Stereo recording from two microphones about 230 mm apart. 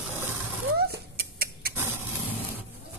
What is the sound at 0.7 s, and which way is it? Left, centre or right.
Rodents, right.